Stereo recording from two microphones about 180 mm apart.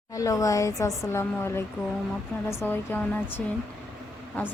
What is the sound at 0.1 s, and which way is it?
Speech, 20° left (ahead or behind).